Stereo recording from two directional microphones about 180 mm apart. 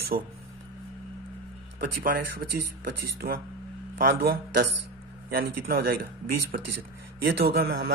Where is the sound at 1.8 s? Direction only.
55° right (ahead or behind).